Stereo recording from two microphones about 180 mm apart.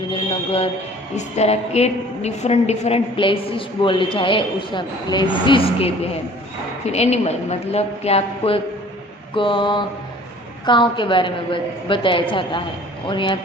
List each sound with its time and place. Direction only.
1.1 s a woman's voice: 35° left (ahead or behind)